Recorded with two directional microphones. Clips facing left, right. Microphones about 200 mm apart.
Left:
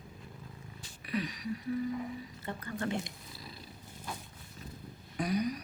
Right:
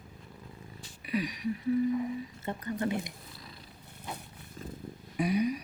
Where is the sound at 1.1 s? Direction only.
10° right (ahead or behind).